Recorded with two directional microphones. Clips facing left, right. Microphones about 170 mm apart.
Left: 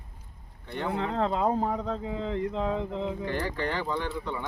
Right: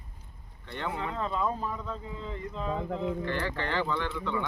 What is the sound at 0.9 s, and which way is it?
Speech, 75° left (ahead or behind).